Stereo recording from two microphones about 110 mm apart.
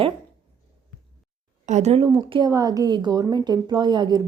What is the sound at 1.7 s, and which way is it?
Speech, 80° right.